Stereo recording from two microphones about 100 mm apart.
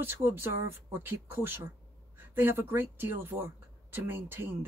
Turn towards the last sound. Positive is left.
turn(degrees=-25)  # may be behind; listen again after turning